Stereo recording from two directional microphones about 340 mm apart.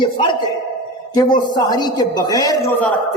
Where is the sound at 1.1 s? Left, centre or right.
Centre.